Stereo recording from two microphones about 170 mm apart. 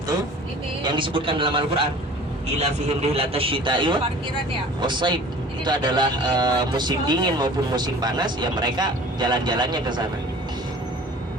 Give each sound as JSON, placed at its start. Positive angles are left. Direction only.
{"t": 0.8, "sound": "speech", "side_deg": -30}
{"t": 2.6, "sound": "a man's voice", "side_deg": -40}